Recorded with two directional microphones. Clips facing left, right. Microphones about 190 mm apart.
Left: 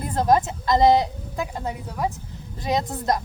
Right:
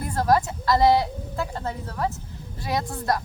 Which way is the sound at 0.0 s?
20° left (ahead or behind).